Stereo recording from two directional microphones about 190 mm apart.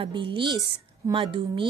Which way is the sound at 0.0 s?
25° right (ahead or behind).